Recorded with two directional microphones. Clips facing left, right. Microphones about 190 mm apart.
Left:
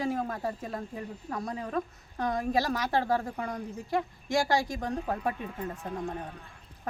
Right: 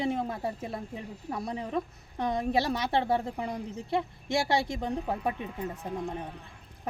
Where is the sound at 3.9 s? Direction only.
25° right (ahead or behind).